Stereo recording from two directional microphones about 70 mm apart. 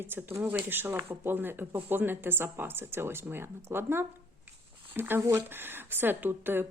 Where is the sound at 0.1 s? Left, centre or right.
Right.